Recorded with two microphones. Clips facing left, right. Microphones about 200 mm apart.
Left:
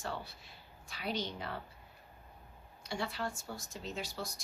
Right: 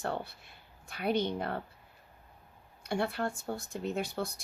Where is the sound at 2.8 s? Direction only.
55° right (ahead or behind).